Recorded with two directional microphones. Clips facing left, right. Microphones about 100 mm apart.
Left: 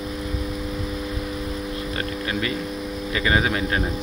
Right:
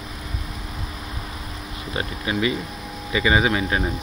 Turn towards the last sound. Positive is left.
turn(degrees=-5)  # may be behind; listen again after turning